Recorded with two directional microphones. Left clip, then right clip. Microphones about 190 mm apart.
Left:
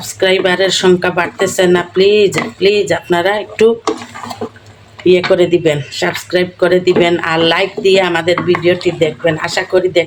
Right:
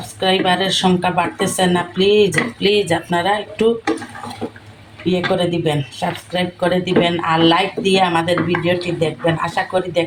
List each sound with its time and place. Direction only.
0.2 s speech: 40° left (ahead or behind)
5.0 s speech: 40° left (ahead or behind)